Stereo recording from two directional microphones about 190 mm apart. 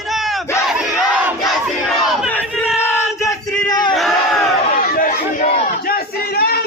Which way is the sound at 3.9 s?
Centre (ahead or behind).